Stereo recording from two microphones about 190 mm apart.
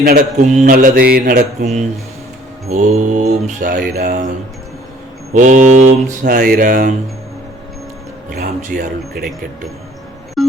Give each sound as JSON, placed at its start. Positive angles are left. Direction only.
{"t": 0.0, "sound": "speech", "side_deg": -50}
{"t": 2.6, "sound": "mantra", "side_deg": -35}
{"t": 5.3, "sound": "speech", "side_deg": -40}
{"t": 8.4, "sound": "speech", "side_deg": -55}
{"t": 10.4, "sound": "busy signal", "side_deg": 0}